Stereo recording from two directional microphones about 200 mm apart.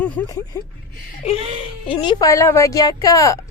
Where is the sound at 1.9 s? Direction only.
20° left (ahead or behind).